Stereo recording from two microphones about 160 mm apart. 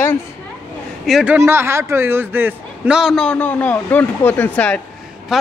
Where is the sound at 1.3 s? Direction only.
15° right (ahead or behind); by 4.8 s 10° left (ahead or behind).